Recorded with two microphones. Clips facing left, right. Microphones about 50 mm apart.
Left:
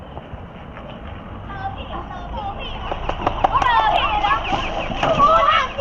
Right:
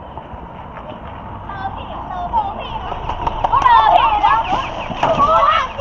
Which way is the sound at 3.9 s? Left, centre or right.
Left.